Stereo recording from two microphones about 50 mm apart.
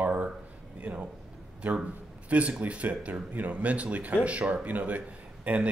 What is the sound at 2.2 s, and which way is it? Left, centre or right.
Speech, right.